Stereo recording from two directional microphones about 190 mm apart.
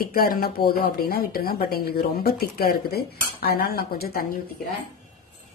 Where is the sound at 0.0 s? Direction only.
50° left (ahead or behind).